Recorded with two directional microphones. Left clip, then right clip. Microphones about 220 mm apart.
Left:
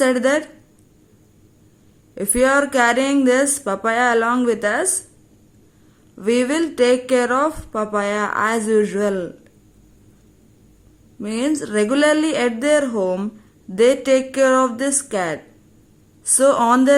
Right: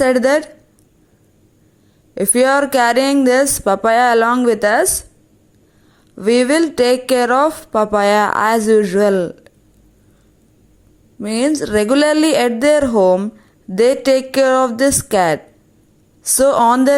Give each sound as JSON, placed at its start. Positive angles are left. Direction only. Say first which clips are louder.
{"t": 0.0, "sound": "speech", "louder": "right 4 dB", "side_deg": -20}
{"t": 2.1, "sound": "speech", "louder": "right 3 dB", "side_deg": -20}
{"t": 6.1, "sound": "speech", "louder": "right 5 dB", "side_deg": -20}
{"t": 11.2, "sound": "speech", "louder": "right 5 dB", "side_deg": -25}